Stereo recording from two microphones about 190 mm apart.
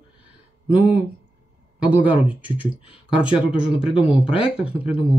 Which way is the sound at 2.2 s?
10° right (ahead or behind).